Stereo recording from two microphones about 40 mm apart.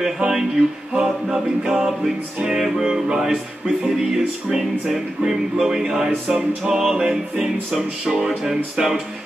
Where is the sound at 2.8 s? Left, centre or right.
Centre.